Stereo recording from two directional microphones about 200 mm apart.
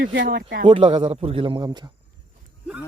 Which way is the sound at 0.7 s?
30° right (ahead or behind).